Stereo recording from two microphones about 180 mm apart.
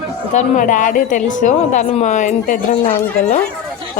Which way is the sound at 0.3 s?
45° left (ahead or behind).